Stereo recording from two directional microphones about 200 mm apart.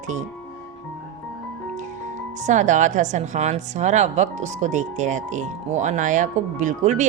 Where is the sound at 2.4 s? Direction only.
35° right (ahead or behind).